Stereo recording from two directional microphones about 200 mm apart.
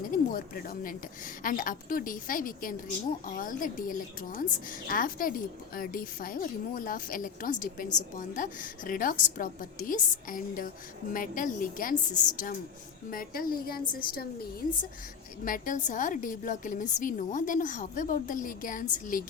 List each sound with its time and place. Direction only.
0.1 s a woman's voice: 40° left (ahead or behind)
15.4 s a woman's voice: 40° left (ahead or behind)